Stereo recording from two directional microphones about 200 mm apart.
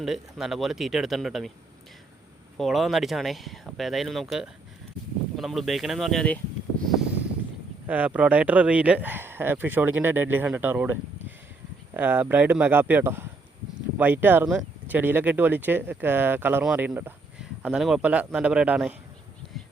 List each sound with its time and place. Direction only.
0.0 s speech: centre (ahead or behind)
2.6 s speech: centre (ahead or behind)
7.9 s speech: 5° right (ahead or behind)
11.9 s speech: 10° right (ahead or behind)